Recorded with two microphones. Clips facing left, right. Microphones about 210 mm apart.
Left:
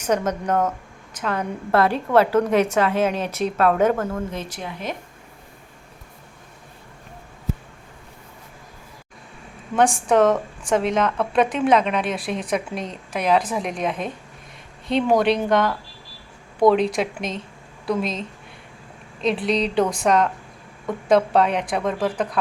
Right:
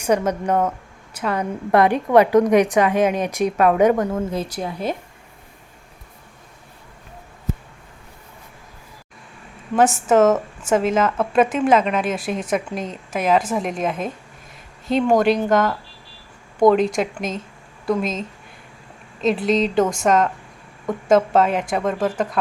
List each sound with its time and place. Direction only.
0.0 s a woman's voice: 10° right (ahead or behind)
4.3 s a woman's voice: 35° right (ahead or behind)
9.7 s a woman's voice: 5° right (ahead or behind)